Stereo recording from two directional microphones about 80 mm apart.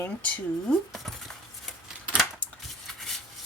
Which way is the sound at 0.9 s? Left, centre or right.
Centre.